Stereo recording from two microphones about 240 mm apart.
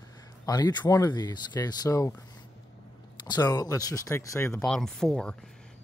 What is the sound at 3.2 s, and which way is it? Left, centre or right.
Speech, centre.